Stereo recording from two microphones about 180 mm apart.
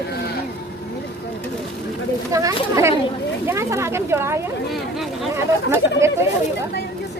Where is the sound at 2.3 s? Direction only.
15° right (ahead or behind).